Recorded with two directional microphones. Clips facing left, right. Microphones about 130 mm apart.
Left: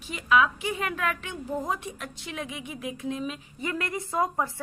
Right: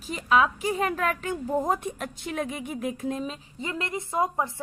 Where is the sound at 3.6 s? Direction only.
25° right (ahead or behind).